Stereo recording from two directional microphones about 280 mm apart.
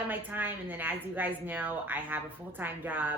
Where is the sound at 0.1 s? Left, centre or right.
Centre.